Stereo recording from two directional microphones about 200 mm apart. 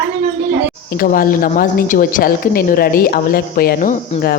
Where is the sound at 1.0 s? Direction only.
45° left (ahead or behind).